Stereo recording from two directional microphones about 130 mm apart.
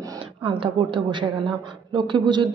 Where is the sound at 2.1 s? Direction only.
35° right (ahead or behind).